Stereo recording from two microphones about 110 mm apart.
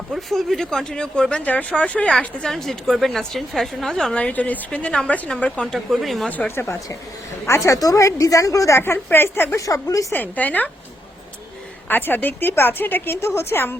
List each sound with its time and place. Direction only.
0.1 s a woman's voice: centre (ahead or behind)
6.3 s a woman's voice: 15° left (ahead or behind)
10.1 s speech: 15° left (ahead or behind)
11.9 s a woman's voice: 20° left (ahead or behind)